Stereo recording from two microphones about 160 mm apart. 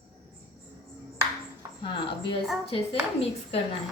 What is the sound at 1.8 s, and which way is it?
Speech, 30° left (ahead or behind).